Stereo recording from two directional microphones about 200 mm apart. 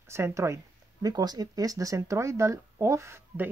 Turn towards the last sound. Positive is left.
turn(degrees=-15)  # may be behind; listen again after turning